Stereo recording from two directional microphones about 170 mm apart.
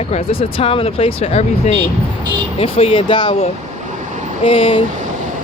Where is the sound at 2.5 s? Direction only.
35° left (ahead or behind).